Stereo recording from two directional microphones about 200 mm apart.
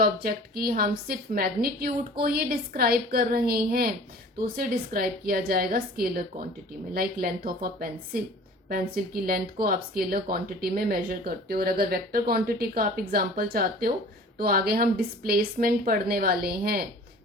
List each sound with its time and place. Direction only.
0.0 s speech: 50° right (ahead or behind)